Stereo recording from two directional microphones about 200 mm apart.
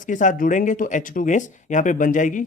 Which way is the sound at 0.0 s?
40° left (ahead or behind).